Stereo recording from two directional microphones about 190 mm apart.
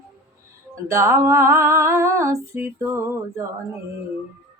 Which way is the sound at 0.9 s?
15° right (ahead or behind).